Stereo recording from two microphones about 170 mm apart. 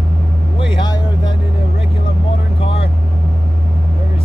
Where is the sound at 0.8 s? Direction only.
25° left (ahead or behind).